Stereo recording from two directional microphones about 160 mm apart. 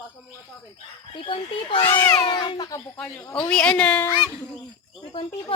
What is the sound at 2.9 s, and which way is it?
A woman's voice, 10° left (ahead or behind).